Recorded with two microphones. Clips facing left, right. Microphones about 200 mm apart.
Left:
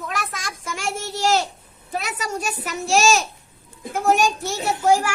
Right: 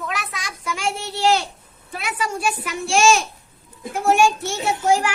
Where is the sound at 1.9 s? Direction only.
40° left (ahead or behind).